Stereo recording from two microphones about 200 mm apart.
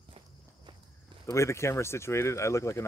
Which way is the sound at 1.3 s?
15° left (ahead or behind).